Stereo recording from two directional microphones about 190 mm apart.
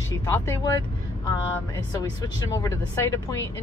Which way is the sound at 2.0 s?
15° left (ahead or behind).